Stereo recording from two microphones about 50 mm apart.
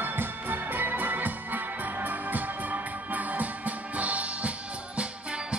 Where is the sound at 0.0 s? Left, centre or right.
Right.